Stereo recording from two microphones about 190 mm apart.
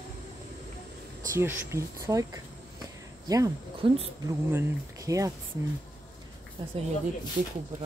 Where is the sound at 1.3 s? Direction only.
15° right (ahead or behind).